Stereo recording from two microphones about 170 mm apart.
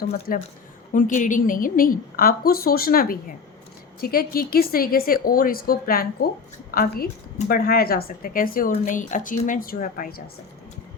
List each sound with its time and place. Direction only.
0.3 s a woman's voice: 55° left (ahead or behind)